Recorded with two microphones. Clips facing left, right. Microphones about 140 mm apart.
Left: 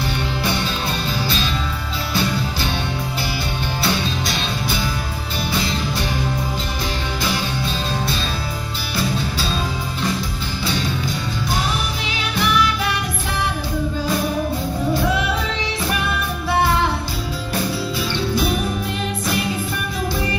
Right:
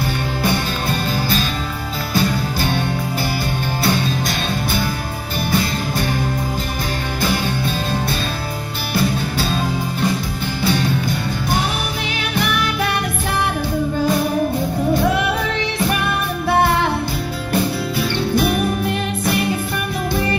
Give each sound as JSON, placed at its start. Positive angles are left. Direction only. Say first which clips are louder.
{"t": 2.1, "sound": "music", "louder": "right 3 dB", "side_deg": -45}
{"t": 8.9, "sound": "music", "louder": "right 4 dB", "side_deg": -50}
{"t": 10.6, "sound": "music", "louder": "right 5 dB", "side_deg": -55}
{"t": 16.0, "sound": "music", "louder": "right 3 dB", "side_deg": -55}
{"t": 18.3, "sound": "music", "louder": "right 4 dB", "side_deg": -55}